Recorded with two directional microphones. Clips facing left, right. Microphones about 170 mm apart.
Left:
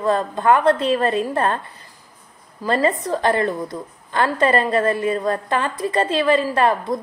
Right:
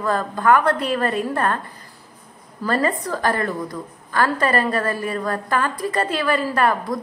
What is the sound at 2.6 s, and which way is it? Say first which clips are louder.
A woman's voice: left 2 dB; 20° left (ahead or behind).